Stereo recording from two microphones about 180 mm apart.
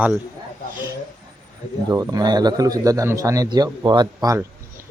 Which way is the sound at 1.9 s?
20° right (ahead or behind).